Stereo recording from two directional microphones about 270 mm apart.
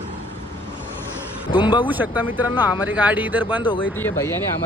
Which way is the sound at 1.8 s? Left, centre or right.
Centre.